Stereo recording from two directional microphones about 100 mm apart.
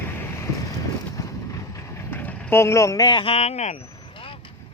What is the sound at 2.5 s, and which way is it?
Speech, 25° left (ahead or behind).